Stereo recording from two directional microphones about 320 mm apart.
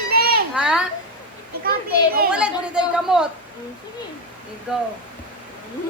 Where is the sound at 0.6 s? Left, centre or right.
Centre.